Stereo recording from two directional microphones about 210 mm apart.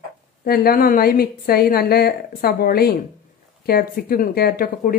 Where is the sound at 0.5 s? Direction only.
45° left (ahead or behind).